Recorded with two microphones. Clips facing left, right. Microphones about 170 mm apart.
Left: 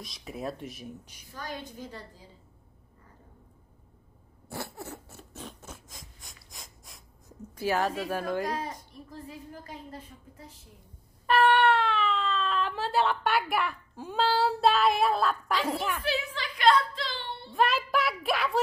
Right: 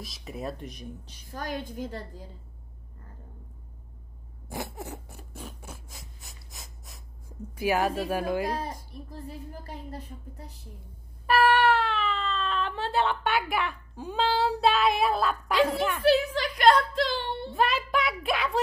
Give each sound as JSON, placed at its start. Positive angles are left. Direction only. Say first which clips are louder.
{"t": 0.0, "sound": "speech", "louder": "even", "side_deg": 0}
{"t": 1.3, "sound": "a woman's voice", "louder": "right 5 dB", "side_deg": -50}
{"t": 4.5, "sound": "zipper", "louder": "right 2 dB", "side_deg": -20}
{"t": 7.5, "sound": "speech", "louder": "right 2 dB", "side_deg": -10}
{"t": 8.5, "sound": "a woman's voice", "louder": "right 1 dB", "side_deg": -30}
{"t": 11.2, "sound": "speech", "louder": "even", "side_deg": -5}
{"t": 16.1, "sound": "a woman's voice", "louder": "right 9 dB", "side_deg": -45}
{"t": 17.6, "sound": "speech", "louder": "even", "side_deg": 0}